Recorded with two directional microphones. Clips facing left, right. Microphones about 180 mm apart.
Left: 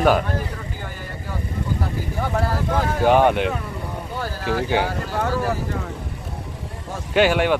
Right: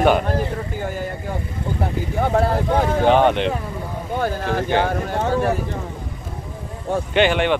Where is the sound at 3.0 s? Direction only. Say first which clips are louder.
Left 1 dB; 10° left (ahead or behind).